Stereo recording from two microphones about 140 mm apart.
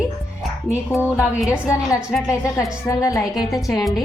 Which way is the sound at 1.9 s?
5° right (ahead or behind).